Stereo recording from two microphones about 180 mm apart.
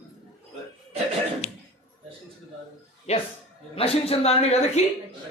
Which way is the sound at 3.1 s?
35° left (ahead or behind).